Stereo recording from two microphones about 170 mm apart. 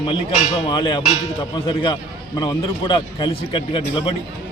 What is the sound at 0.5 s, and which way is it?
A man's voice, 30° left (ahead or behind).